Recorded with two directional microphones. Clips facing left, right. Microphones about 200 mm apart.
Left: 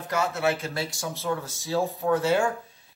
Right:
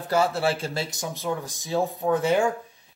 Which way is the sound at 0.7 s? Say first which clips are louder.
Right 1 dB; 20° right (ahead or behind).